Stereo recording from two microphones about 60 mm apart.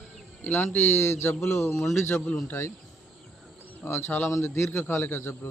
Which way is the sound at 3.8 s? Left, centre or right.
Left.